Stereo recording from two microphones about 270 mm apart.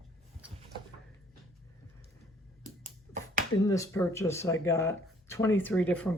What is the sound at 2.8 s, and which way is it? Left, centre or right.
Finger snapping, right.